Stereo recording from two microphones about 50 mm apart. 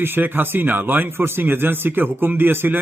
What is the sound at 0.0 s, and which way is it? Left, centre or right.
Speech, right.